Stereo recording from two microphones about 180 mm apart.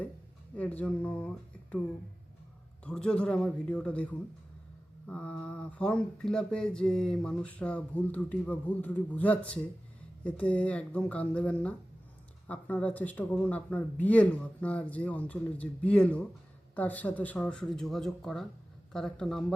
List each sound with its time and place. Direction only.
0.5 s speech: 10° left (ahead or behind)
2.8 s speech: 5° left (ahead or behind)